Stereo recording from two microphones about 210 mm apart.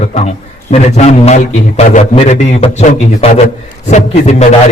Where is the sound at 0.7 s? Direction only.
35° left (ahead or behind).